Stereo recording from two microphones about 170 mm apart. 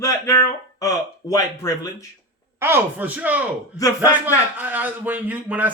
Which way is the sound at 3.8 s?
20° left (ahead or behind).